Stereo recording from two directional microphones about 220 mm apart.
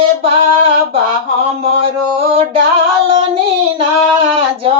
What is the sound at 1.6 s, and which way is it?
Music, 25° right (ahead or behind).